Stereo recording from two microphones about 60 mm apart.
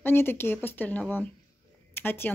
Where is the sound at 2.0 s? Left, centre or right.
Left.